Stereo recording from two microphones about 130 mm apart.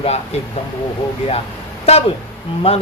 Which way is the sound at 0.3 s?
50° left (ahead or behind).